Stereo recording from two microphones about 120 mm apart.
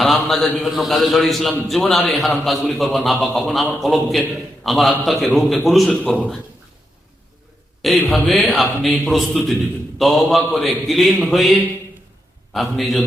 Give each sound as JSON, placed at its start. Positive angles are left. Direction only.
{"t": 0.0, "sound": "a man's voice", "side_deg": 0}
{"t": 7.8, "sound": "a man's voice", "side_deg": 0}